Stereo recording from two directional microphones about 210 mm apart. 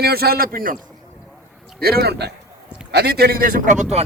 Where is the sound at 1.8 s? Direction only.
45° right (ahead or behind).